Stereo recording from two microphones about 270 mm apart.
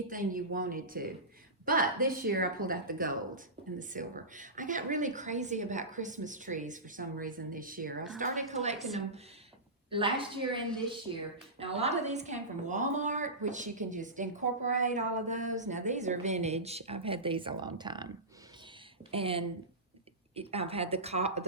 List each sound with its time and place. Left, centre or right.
0.1 s speech: right
9.9 s speech: centre
11.6 s speech: right
19.1 s speech: centre